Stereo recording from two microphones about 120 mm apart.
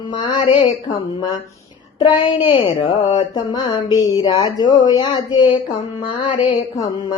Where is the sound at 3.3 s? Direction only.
35° left (ahead or behind).